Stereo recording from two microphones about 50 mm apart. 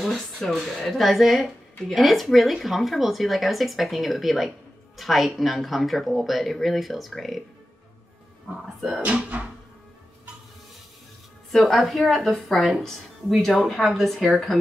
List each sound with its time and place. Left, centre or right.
0.0 s speech: centre
9.3 s music: right
11.5 s speech: centre